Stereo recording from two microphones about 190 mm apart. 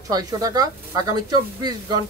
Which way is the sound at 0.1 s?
20° right (ahead or behind).